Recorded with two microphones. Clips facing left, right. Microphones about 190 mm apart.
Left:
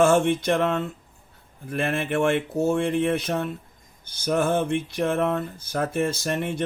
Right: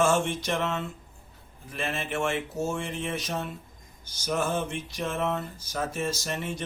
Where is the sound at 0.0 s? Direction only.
55° left (ahead or behind).